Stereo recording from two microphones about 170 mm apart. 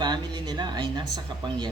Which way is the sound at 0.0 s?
25° right (ahead or behind).